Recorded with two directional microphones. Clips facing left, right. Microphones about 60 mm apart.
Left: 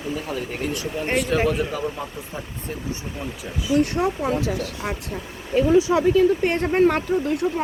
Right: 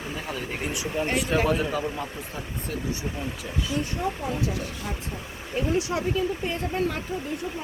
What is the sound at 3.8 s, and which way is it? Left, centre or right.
Speech, left.